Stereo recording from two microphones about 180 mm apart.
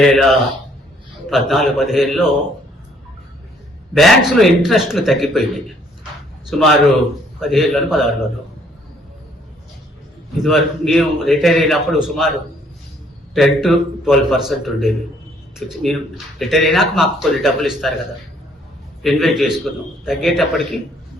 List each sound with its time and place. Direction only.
0.0 s speech: centre (ahead or behind)
3.9 s speech: centre (ahead or behind)
6.5 s speech: centre (ahead or behind)
10.4 s speech: centre (ahead or behind)
19.0 s speech: centre (ahead or behind)